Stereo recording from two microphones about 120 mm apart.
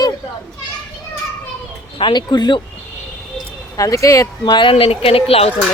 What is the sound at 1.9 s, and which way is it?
Speech, 40° left (ahead or behind).